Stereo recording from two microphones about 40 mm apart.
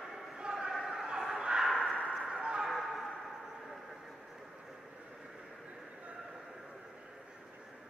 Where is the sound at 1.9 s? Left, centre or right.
Left.